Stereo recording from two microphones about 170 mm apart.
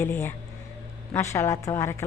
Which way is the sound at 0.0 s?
15° left (ahead or behind).